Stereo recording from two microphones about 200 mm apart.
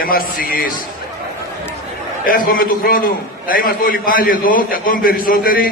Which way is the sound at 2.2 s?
45° left (ahead or behind).